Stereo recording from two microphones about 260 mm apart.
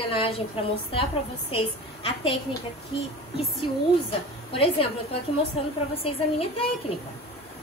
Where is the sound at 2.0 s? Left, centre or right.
Left.